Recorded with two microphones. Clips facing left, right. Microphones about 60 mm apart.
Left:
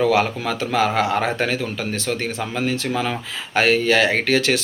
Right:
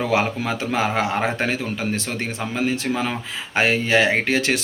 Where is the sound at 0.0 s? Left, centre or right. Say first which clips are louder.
Left 3 dB; right.